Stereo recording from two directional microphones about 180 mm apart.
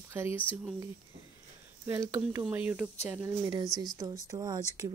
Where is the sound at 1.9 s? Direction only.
15° right (ahead or behind).